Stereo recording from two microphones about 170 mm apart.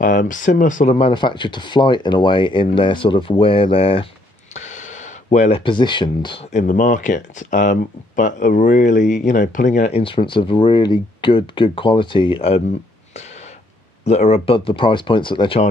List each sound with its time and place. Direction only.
0.0 s speech: 50° left (ahead or behind)
0.9 s speech: 30° left (ahead or behind)
4.6 s a sound: 45° left (ahead or behind)
5.6 s speech: 30° left (ahead or behind)
6.5 s speech: 50° left (ahead or behind)
14.0 s speech: 40° left (ahead or behind)